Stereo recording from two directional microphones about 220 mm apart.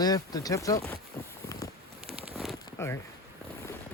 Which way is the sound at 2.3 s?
Centre (ahead or behind).